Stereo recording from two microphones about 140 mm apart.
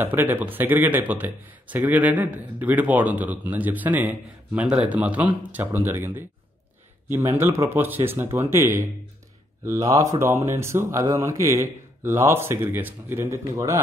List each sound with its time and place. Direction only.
0.0 s speech: 15° right (ahead or behind)